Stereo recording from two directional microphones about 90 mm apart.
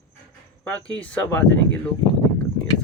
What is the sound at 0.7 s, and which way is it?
Speech, 15° left (ahead or behind).